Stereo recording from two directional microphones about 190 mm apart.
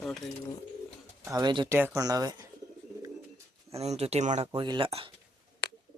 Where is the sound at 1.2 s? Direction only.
20° right (ahead or behind).